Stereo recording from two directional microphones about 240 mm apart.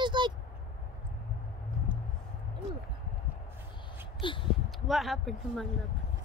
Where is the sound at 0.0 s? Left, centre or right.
Centre.